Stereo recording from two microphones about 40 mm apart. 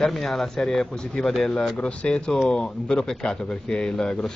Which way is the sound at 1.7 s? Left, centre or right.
Left.